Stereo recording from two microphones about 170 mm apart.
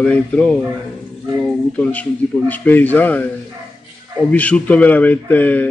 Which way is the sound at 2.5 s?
10° left (ahead or behind).